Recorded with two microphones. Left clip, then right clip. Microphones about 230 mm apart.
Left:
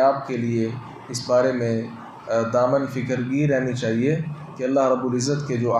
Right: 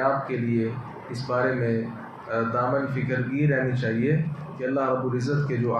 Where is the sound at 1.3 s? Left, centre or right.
Left.